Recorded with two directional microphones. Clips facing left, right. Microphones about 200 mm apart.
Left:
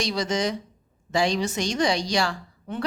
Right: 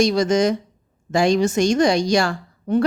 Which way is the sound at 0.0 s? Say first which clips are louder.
Right 9 dB; 45° right (ahead or behind).